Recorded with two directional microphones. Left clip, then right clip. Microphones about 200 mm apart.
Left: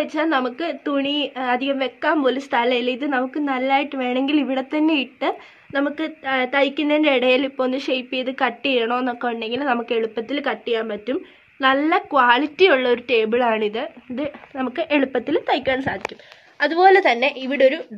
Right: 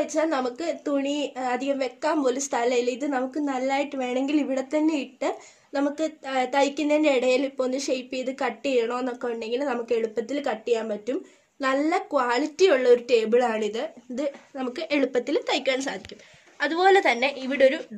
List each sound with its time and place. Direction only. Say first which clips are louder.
0.0 s speech: left 4 dB; 40° left (ahead or behind)